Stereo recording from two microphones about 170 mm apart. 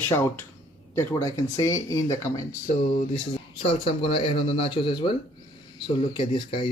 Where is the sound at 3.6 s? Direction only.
35° left (ahead or behind).